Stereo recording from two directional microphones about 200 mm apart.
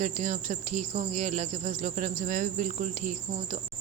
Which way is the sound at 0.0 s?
35° right (ahead or behind).